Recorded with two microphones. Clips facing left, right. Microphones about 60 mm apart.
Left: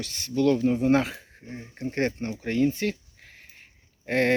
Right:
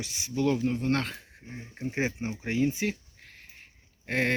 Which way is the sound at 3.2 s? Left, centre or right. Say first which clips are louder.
Left 1 dB; centre.